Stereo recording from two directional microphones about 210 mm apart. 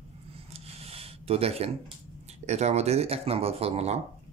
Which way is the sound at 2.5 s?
30° right (ahead or behind).